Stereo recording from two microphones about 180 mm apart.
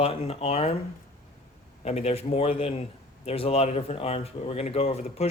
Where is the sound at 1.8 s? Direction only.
35° left (ahead or behind).